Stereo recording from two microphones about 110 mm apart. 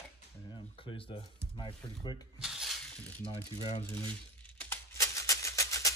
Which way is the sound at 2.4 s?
5° right (ahead or behind).